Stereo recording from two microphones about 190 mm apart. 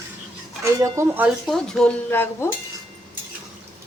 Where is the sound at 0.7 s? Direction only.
15° right (ahead or behind).